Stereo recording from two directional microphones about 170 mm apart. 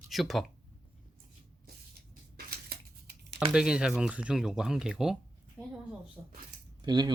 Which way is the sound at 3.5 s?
5° right (ahead or behind).